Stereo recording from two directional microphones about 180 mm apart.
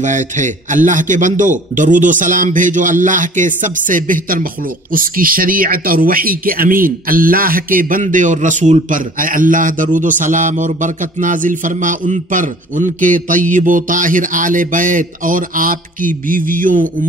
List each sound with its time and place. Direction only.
0.0 s speech: 45° right (ahead or behind)